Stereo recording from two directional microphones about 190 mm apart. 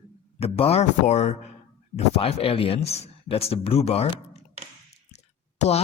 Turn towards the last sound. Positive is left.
turn(degrees=35)  # may be behind; listen again after turning